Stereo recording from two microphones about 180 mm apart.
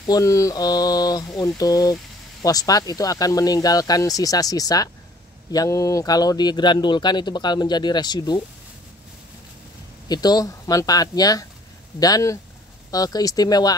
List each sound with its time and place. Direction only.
0.0 s a man's voice: 20° left (ahead or behind)
10.0 s a man's voice: 20° left (ahead or behind)